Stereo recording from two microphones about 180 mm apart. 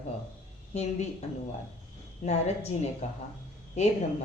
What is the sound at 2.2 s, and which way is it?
Speech, 35° left (ahead or behind).